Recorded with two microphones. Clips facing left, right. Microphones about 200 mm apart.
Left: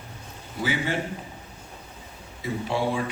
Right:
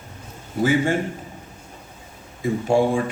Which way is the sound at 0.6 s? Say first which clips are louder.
Right 8 dB; 45° right (ahead or behind).